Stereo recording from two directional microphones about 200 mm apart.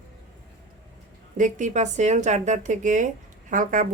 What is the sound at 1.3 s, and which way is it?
Speech, 40° right (ahead or behind).